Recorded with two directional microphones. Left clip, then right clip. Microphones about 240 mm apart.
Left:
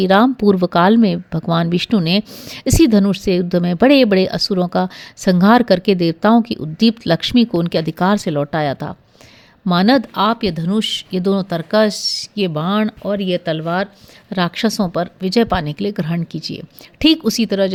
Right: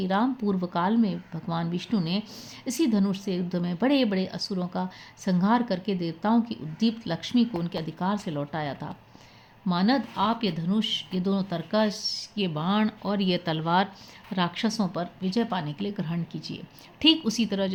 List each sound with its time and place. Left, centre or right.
0.0 s speech: left; by 13.8 s centre
14.3 s speech: left